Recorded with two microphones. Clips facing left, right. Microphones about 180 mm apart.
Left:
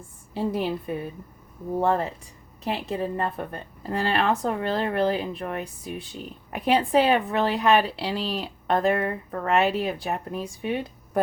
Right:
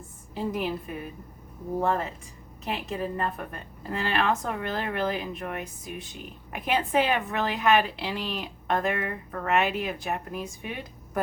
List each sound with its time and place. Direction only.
0.3 s a woman's voice: 30° left (ahead or behind)